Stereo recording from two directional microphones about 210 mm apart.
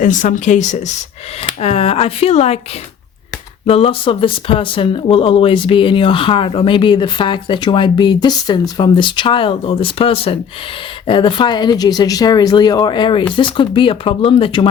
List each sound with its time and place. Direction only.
0.0 s speech: 40° left (ahead or behind)
3.7 s speech: 25° left (ahead or behind)